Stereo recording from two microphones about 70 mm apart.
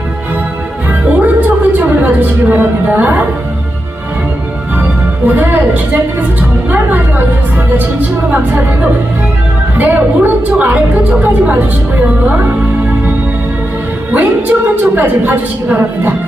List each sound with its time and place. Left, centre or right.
1.1 s a woman's voice: right
4.8 s music: right
9.7 s a woman's voice: right
14.1 s a woman's voice: right